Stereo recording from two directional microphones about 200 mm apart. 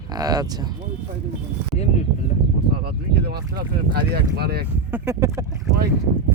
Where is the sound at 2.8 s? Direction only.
50° right (ahead or behind).